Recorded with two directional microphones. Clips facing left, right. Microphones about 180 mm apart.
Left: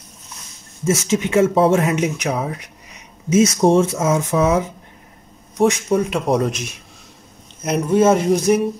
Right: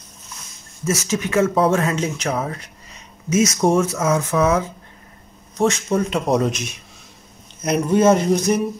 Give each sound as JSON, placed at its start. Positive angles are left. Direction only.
{"t": 0.8, "sound": "speech", "side_deg": 20}
{"t": 3.3, "sound": "speech", "side_deg": 30}
{"t": 5.7, "sound": "speech", "side_deg": 5}
{"t": 7.6, "sound": "speech", "side_deg": 0}